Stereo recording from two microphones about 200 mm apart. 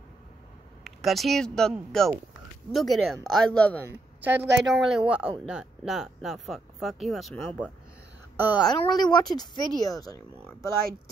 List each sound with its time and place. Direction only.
0.8 s speech: centre (ahead or behind)
4.2 s a woman's voice: 10° right (ahead or behind)
8.6 s speech: 20° left (ahead or behind)